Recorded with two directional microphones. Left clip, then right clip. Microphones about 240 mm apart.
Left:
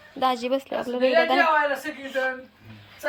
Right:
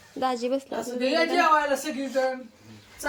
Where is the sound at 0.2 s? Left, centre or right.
Centre.